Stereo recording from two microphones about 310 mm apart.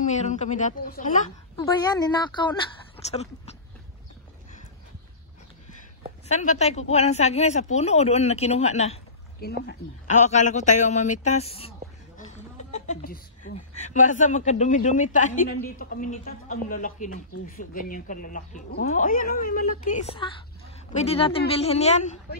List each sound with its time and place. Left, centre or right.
0.0 s speech: left
1.6 s a woman's voice: centre
6.2 s speech: left